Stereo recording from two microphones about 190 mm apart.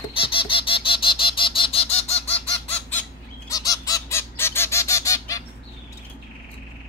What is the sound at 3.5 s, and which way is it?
Honk, 20° left (ahead or behind).